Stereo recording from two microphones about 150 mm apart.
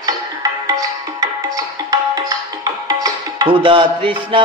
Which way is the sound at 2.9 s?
30° right (ahead or behind).